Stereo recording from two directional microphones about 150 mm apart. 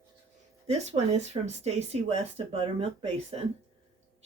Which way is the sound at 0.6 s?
45° right (ahead or behind).